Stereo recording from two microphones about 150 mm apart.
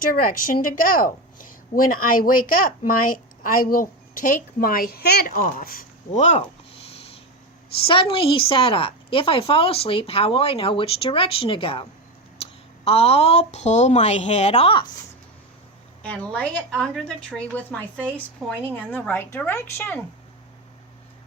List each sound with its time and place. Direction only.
0.0 s a woman's voice: 70° left (ahead or behind)
6.1 s speech: 50° left (ahead or behind)
7.8 s a woman's voice: 40° left (ahead or behind)
16.0 s a woman's voice: 10° left (ahead or behind)